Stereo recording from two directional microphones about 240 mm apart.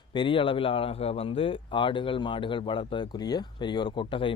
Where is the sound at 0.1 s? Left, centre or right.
Left.